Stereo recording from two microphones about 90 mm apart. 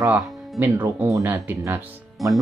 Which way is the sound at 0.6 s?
25° right (ahead or behind).